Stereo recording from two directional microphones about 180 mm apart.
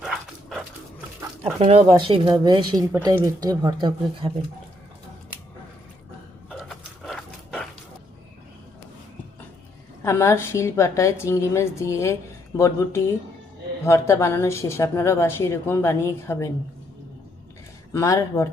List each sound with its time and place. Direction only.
0.0 s dog: 5° right (ahead or behind)
1.4 s speech: 35° right (ahead or behind)
6.5 s a sound: 5° right (ahead or behind)
10.0 s a woman's voice: 15° left (ahead or behind)
17.9 s a woman's voice: 15° left (ahead or behind)